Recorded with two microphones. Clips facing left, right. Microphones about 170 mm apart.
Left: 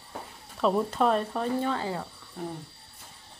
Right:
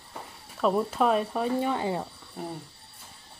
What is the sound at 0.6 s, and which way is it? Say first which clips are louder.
Speech: even; 5° right (ahead or behind).